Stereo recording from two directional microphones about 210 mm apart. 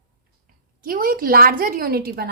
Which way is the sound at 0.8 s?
45° right (ahead or behind).